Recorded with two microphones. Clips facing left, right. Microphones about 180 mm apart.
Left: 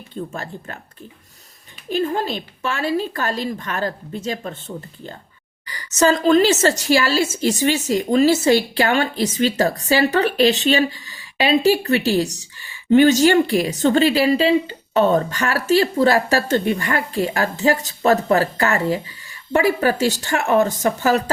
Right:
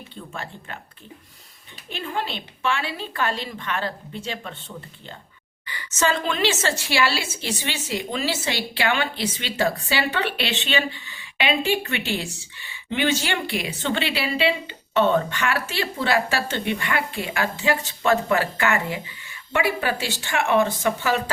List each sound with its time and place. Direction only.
0.1 s a woman's voice: 40° left (ahead or behind)
1.9 s a woman's voice: 40° left (ahead or behind)